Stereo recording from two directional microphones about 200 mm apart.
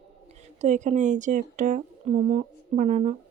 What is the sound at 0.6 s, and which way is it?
Speech, 35° right (ahead or behind).